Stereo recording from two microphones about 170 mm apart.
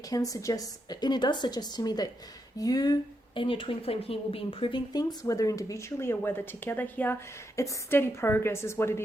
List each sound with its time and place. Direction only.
0.1 s speech: 20° left (ahead or behind)